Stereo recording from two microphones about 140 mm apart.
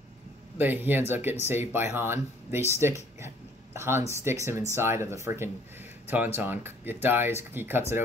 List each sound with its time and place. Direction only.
0.6 s speech: 15° right (ahead or behind)